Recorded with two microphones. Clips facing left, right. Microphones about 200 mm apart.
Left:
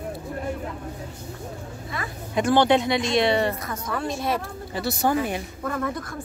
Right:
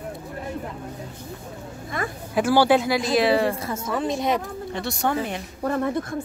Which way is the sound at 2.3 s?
5° right (ahead or behind).